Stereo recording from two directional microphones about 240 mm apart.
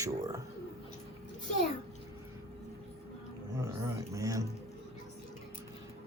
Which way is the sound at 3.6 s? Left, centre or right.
Centre.